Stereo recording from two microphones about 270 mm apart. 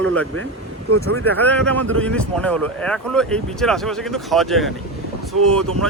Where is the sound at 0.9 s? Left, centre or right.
Right.